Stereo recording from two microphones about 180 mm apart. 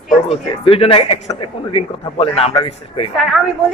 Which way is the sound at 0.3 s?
30° left (ahead or behind).